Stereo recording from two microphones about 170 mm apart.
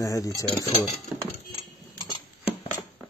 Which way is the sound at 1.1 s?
Centre (ahead or behind).